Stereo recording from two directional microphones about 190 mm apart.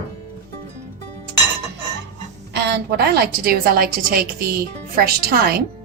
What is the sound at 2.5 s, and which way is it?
A woman's voice, 60° right (ahead or behind).